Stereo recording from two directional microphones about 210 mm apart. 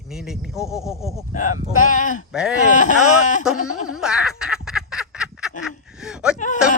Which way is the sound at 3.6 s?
90° left.